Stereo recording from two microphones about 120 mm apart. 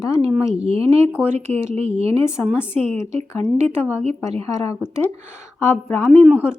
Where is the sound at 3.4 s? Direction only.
65° right (ahead or behind).